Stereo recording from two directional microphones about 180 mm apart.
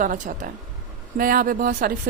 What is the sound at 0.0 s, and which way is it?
Speech, 50° right (ahead or behind).